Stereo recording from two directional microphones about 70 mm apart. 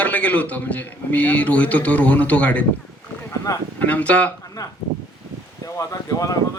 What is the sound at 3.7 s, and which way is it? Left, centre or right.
Speech, left.